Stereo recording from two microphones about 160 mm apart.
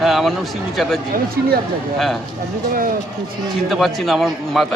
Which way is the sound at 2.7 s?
65° right (ahead or behind).